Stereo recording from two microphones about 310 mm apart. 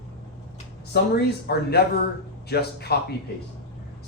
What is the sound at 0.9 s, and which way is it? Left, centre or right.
Speech, left.